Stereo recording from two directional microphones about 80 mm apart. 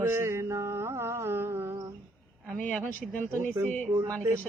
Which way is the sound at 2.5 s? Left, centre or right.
Centre.